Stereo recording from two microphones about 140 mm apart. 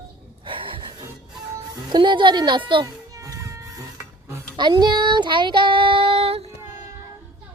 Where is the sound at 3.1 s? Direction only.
25° right (ahead or behind).